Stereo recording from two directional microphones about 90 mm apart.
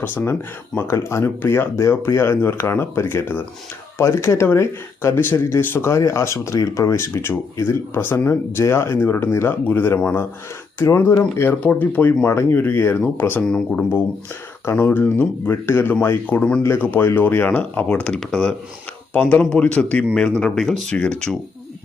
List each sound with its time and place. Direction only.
0.0 s speech: 20° left (ahead or behind)
13.4 s speech: 10° left (ahead or behind)
14.6 s speech: 25° left (ahead or behind); by 20.9 s 5° left (ahead or behind)
20.9 s speech: 15° left (ahead or behind)